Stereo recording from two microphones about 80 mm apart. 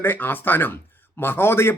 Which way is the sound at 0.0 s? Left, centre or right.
Left.